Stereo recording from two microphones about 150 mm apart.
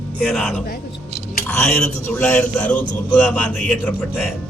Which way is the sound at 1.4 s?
15° left (ahead or behind).